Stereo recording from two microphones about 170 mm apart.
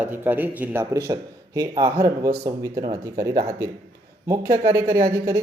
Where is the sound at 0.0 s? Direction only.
10° right (ahead or behind).